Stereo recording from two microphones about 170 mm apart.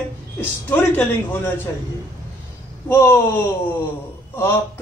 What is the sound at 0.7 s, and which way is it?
Speech, 10° left (ahead or behind).